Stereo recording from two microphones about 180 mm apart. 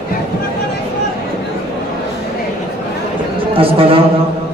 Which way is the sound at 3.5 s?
30° right (ahead or behind).